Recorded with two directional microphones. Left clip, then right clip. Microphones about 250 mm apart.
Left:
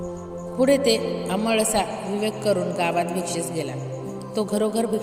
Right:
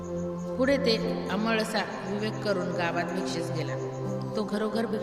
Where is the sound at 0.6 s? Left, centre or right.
Centre.